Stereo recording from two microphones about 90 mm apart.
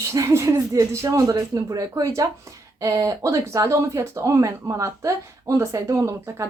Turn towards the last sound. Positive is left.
turn(degrees=-35)  # may be behind; listen again after turning